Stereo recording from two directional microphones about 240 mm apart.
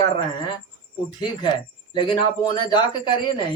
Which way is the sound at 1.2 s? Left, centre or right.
Centre.